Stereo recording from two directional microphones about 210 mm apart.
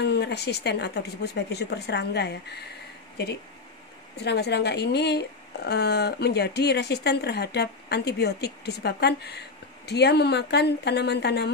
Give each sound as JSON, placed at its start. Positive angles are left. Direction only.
{"t": 0.0, "sound": "speech", "side_deg": 55}
{"t": 4.2, "sound": "speech", "side_deg": 55}